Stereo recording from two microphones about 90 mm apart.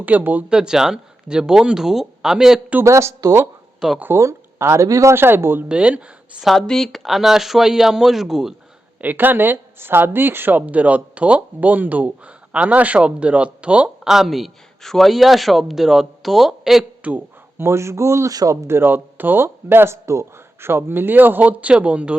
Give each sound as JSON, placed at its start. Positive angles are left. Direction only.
{"t": 0.0, "sound": "speech", "side_deg": -20}
{"t": 0.5, "sound": "speech", "side_deg": -5}
{"t": 2.8, "sound": "a man's voice", "side_deg": -35}
{"t": 3.8, "sound": "speech", "side_deg": -5}
{"t": 4.0, "sound": "speech", "side_deg": -30}
{"t": 5.6, "sound": "speech", "side_deg": -10}
{"t": 6.4, "sound": "speech", "side_deg": 5}
{"t": 9.0, "sound": "speech", "side_deg": -20}
{"t": 17.0, "sound": "speech", "side_deg": -15}
{"t": 17.6, "sound": "a man's voice", "side_deg": -30}
{"t": 18.8, "sound": "speech", "side_deg": -20}